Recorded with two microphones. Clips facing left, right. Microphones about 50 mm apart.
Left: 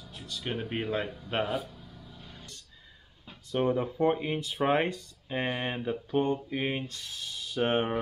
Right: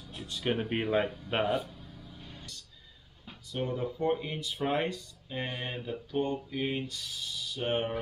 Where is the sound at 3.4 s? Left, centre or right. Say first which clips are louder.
Left 6 dB; left.